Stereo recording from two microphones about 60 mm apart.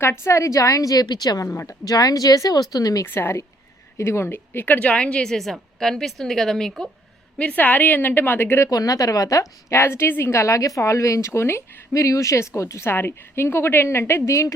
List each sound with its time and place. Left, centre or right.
0.0 s speech: left
1.6 s speech: left
3.1 s a woman's voice: left
4.8 s a woman's voice: left
7.3 s a woman's voice: left
8.7 s a woman's voice: left
9.7 s speech: left
11.3 s speech: left
12.9 s a woman's voice: left
14.3 s speech: left